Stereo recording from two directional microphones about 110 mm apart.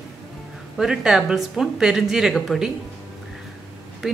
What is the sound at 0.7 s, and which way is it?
A woman's voice, 5° right (ahead or behind).